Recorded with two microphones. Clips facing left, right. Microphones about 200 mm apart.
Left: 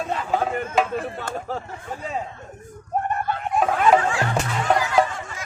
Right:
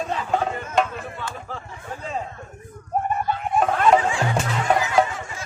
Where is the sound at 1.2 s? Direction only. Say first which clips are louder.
Left 4 dB; 40° left (ahead or behind).